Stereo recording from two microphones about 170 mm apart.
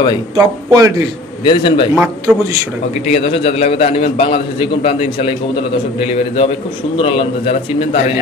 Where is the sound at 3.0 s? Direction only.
35° left (ahead or behind).